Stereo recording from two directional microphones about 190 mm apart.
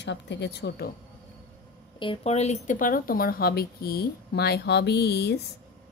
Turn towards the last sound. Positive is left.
turn(degrees=60)  # may be behind; listen again after turning